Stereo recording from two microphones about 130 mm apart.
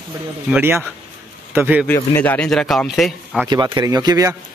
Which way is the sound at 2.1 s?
10° left (ahead or behind).